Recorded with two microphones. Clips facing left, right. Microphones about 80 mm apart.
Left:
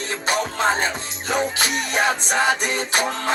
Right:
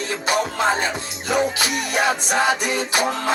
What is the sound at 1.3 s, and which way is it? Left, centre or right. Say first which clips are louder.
Music: right 2 dB; left.